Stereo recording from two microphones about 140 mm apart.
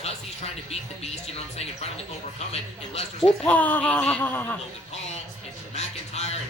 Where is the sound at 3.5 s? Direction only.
10° left (ahead or behind).